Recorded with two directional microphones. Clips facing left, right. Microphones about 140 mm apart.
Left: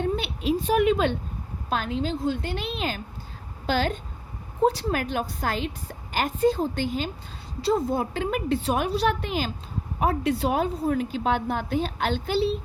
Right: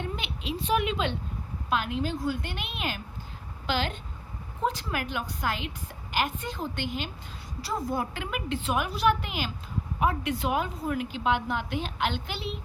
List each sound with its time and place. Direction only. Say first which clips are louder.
0.0 s a sound: left 9 dB; 45° left (ahead or behind)
1.7 s a woman's voice: left 2 dB; 35° left (ahead or behind)
7.6 s a woman's voice: left 7 dB; 25° left (ahead or behind)